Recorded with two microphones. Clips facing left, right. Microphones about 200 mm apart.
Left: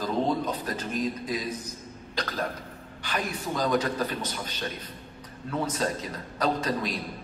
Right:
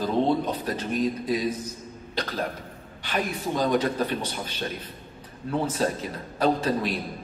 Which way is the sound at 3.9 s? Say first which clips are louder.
Right 3 dB; 30° right (ahead or behind).